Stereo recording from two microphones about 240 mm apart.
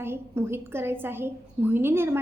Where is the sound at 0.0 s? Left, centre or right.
Centre.